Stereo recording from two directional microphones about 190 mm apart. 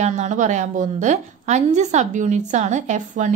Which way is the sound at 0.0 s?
40° right (ahead or behind).